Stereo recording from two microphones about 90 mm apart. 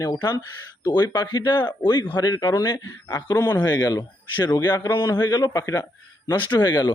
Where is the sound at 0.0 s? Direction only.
45° left (ahead or behind).